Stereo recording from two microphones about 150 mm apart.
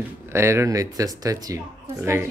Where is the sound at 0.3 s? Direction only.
15° right (ahead or behind).